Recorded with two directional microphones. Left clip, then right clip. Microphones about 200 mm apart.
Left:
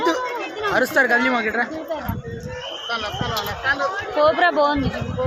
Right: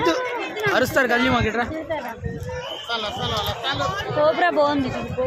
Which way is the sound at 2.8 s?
10° right (ahead or behind).